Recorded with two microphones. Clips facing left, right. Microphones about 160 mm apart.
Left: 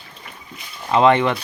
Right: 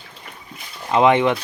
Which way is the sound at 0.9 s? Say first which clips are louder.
Even; 15° right (ahead or behind).